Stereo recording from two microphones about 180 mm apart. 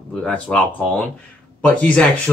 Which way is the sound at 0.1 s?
5° left (ahead or behind).